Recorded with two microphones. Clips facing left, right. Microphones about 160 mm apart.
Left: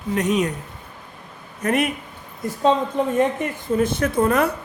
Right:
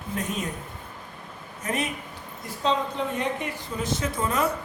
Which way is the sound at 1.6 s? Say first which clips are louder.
Left 8 dB; 65° left (ahead or behind).